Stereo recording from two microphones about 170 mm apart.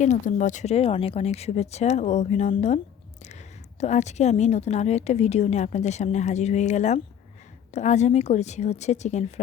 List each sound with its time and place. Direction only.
0.0 s a woman's voice: 45° left (ahead or behind)